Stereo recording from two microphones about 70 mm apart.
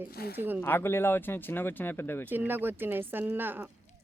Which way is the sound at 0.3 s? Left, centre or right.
Right.